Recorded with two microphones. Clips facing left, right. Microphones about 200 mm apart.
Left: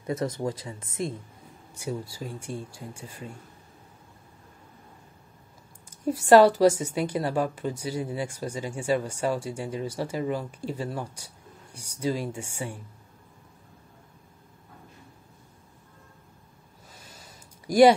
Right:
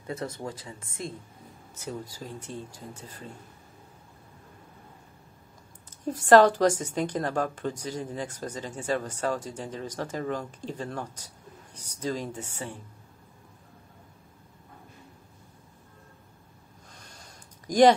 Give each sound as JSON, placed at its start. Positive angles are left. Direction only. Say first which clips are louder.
{"t": 0.2, "sound": "speech", "louder": "left 6 dB", "side_deg": 35}
{"t": 1.8, "sound": "a woman's voice", "louder": "left 4 dB", "side_deg": 10}
{"t": 5.9, "sound": "a woman's voice", "louder": "left 1 dB", "side_deg": 10}
{"t": 16.9, "sound": "a sound", "louder": "left 2 dB", "side_deg": 5}